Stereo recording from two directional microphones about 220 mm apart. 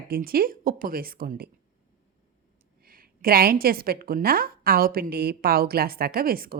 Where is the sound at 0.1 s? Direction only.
40° right (ahead or behind).